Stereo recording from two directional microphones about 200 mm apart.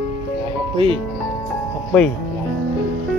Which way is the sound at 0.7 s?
25° right (ahead or behind).